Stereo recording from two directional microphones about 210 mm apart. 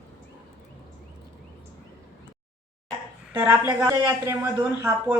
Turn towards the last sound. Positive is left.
turn(degrees=-10)  # may be behind; listen again after turning